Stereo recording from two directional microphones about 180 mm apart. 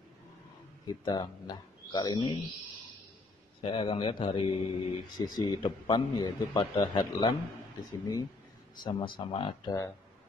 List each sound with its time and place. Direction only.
0.8 s speech: 25° left (ahead or behind)
3.6 s speech: 30° left (ahead or behind)